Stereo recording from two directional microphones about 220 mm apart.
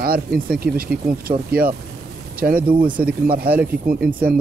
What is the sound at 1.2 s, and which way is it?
Speech, 40° right (ahead or behind).